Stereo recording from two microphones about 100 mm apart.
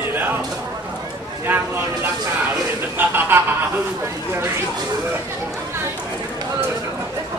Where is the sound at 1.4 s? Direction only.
20° right (ahead or behind).